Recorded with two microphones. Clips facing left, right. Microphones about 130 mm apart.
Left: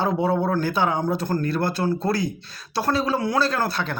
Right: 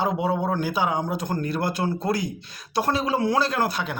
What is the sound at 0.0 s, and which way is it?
Speech, 15° right (ahead or behind).